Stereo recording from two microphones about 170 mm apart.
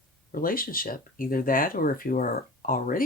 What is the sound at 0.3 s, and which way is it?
Speech, 55° left (ahead or behind).